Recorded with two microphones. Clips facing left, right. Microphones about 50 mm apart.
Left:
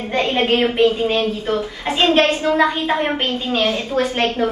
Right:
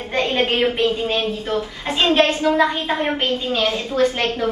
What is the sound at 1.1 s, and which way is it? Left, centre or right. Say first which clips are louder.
Speech: left 2 dB; left.